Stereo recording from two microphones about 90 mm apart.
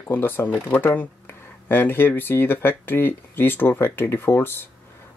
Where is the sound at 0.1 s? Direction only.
20° left (ahead or behind).